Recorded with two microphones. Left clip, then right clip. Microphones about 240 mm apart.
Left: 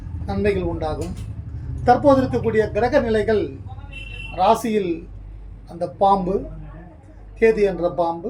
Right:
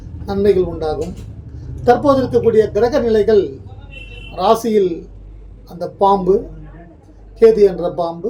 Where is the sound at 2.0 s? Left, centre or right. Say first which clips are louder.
Right 4 dB; centre.